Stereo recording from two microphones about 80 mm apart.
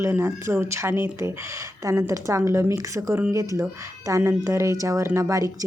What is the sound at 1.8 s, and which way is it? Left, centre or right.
Speech, right.